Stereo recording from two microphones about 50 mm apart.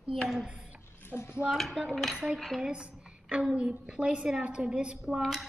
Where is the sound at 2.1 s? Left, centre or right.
Right.